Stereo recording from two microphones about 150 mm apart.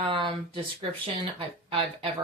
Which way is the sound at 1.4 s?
40° right (ahead or behind).